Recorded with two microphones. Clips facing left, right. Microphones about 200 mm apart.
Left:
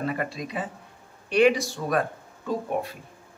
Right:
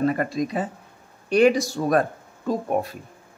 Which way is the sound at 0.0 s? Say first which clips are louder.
Right 7 dB; 45° right (ahead or behind).